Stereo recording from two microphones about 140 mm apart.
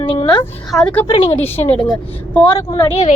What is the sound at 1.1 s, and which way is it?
Speech, 45° left (ahead or behind).